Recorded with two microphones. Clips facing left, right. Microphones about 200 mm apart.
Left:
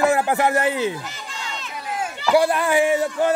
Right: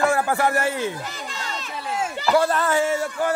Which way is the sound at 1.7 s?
25° right (ahead or behind).